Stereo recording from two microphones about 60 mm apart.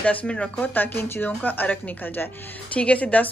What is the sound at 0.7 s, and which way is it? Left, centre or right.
A woman's voice, left.